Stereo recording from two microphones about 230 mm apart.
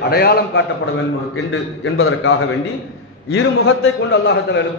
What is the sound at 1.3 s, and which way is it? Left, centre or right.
A man's voice, left.